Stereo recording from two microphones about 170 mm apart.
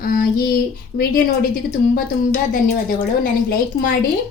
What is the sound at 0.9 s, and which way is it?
Speech, 50° left (ahead or behind).